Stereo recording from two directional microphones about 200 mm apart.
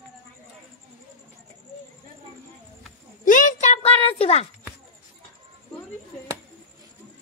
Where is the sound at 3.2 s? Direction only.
40° left (ahead or behind).